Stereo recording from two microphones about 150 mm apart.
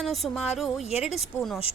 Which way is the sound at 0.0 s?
Centre (ahead or behind).